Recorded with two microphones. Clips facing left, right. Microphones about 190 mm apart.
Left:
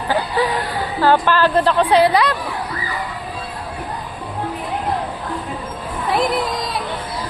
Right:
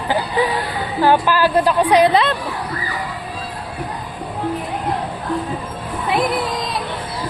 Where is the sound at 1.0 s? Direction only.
10° right (ahead or behind).